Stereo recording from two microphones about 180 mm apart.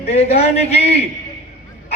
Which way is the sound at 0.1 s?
35° left (ahead or behind).